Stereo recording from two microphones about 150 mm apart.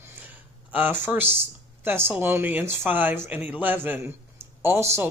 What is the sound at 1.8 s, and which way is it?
Speech, 15° right (ahead or behind).